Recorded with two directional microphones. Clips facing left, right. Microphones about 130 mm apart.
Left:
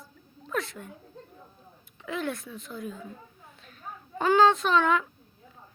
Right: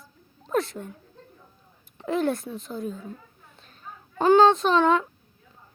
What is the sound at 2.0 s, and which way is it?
Speech, 40° right (ahead or behind).